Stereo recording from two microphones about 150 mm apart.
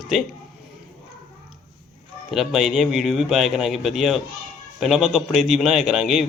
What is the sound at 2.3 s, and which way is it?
A man's voice, centre (ahead or behind).